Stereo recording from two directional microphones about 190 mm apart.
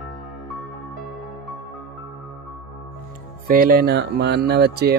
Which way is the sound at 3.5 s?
50° right (ahead or behind).